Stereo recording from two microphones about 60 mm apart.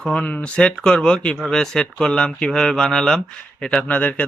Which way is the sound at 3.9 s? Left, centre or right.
Left.